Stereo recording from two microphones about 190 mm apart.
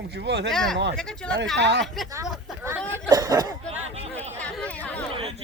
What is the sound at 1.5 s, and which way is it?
Speech, 65° right (ahead or behind).